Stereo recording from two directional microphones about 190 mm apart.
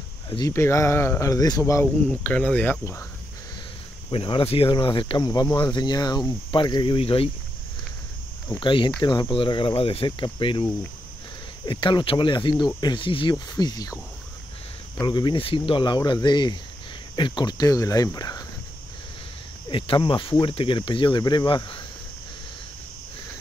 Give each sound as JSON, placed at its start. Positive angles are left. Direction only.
{"t": 0.5, "sound": "speech", "side_deg": 15}
{"t": 4.1, "sound": "speech", "side_deg": 30}
{"t": 8.5, "sound": "speech", "side_deg": 25}
{"t": 15.0, "sound": "speech", "side_deg": 25}
{"t": 19.7, "sound": "speech", "side_deg": 25}